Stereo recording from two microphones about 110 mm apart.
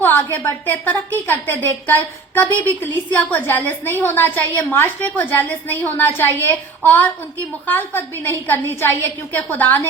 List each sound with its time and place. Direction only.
0.0 s a woman's voice: 20° left (ahead or behind)